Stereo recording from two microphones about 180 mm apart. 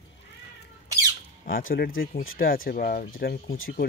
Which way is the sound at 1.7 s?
60° left (ahead or behind).